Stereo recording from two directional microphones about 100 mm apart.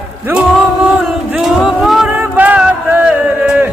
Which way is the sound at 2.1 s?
15° right (ahead or behind).